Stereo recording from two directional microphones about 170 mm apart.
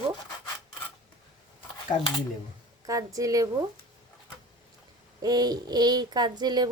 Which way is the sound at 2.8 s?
20° right (ahead or behind).